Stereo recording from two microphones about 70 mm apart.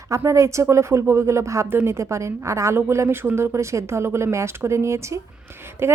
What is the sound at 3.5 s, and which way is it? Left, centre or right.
A woman's voice, right.